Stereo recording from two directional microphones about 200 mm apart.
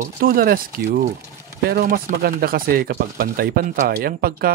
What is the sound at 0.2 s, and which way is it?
Speech, 45° right (ahead or behind).